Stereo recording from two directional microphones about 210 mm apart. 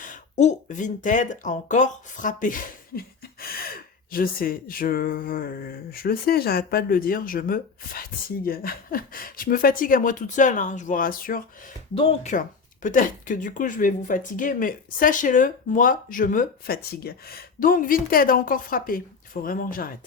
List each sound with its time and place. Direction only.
0.0 s speech: 35° left (ahead or behind)
4.1 s speech: 40° left (ahead or behind)
11.9 s speech: 30° left (ahead or behind)